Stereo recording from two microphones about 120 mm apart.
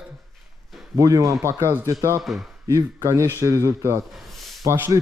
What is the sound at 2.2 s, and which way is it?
Speech, centre (ahead or behind).